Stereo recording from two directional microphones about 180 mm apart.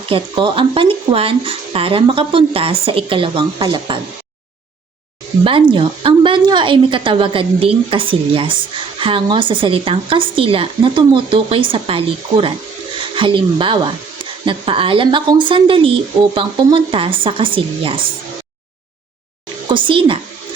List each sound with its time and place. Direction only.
0.1 s speech: 30° right (ahead or behind)
5.4 s speech: 30° right (ahead or behind)
19.6 s speech: 30° right (ahead or behind)